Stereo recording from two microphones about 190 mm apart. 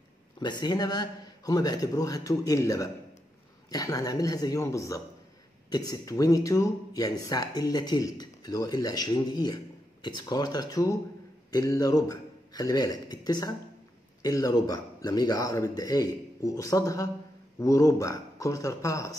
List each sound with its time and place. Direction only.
0.4 s a man's voice: 20° left (ahead or behind)